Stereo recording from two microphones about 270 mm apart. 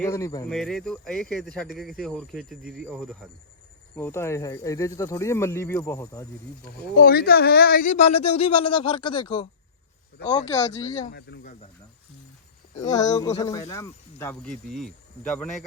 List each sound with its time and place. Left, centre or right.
0.0 s speech: centre
0.4 s speech: centre
3.9 s speech: centre
6.9 s speech: left
12.8 s speech: centre